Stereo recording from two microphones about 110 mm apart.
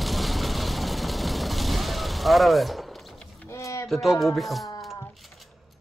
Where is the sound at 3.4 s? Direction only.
25° left (ahead or behind).